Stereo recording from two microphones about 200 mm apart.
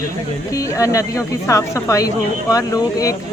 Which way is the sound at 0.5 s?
15° left (ahead or behind).